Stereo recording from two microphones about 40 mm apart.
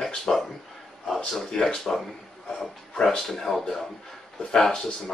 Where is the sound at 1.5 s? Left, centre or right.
Centre.